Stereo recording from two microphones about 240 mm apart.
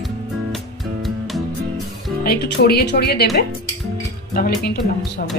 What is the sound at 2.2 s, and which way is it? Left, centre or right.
Speech, left.